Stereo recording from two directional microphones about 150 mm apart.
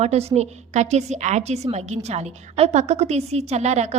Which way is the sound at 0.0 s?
45° right (ahead or behind).